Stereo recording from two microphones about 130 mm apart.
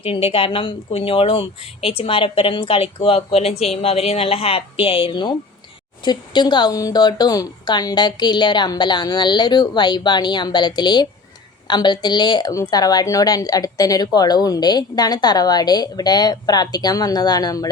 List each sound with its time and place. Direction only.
0.0 s a woman's voice: 45° left (ahead or behind); by 17.7 s 30° left (ahead or behind)